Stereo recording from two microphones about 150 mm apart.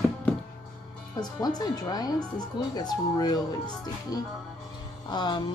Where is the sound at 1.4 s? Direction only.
25° left (ahead or behind).